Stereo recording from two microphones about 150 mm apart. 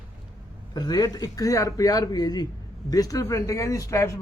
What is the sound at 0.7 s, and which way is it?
A man's voice, 25° left (ahead or behind).